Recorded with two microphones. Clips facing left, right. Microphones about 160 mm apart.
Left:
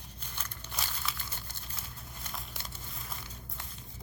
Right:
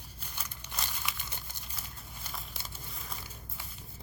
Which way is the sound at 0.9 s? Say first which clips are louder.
Even; 15° right (ahead or behind).